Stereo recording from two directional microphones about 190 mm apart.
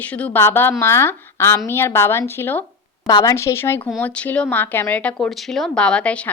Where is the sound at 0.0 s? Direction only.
10° left (ahead or behind).